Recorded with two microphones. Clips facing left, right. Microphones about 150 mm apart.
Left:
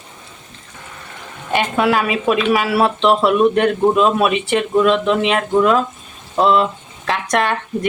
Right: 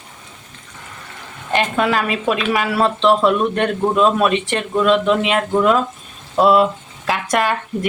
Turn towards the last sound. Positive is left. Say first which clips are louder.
# even
turn(degrees=-5)  # may be behind; listen again after turning